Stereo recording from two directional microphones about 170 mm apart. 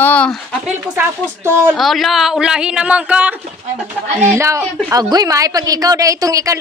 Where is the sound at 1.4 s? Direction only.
15° right (ahead or behind).